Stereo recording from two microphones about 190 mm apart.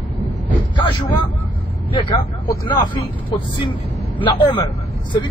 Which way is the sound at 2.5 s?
20° left (ahead or behind).